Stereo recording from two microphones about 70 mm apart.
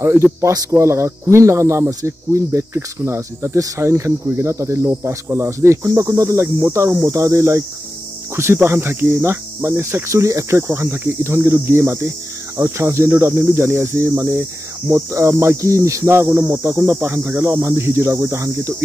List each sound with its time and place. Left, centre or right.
0.0 s speech: right
0.5 s speech: right
0.7 s speech: right
5.9 s speech: right
6.7 s speech: right
10.7 s speech: right
16.4 s speech: right